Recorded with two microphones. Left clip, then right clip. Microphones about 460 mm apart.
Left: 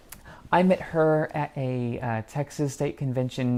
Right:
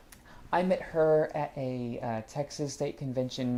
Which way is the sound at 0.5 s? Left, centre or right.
Left.